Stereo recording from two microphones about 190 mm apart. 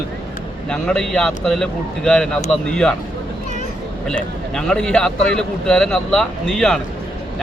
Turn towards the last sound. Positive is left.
turn(degrees=5)  # may be behind; listen again after turning